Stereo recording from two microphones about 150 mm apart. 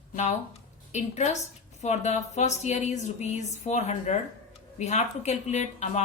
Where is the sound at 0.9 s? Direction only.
50° left (ahead or behind).